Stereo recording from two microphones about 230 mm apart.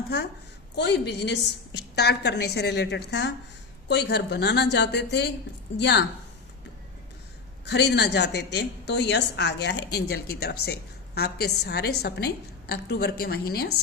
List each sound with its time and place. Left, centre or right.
0.8 s a woman's voice: left
7.6 s a woman's voice: left